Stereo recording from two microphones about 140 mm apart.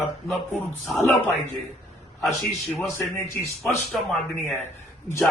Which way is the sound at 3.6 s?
Centre (ahead or behind).